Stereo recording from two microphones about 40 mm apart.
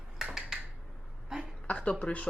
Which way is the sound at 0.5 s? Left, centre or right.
Centre.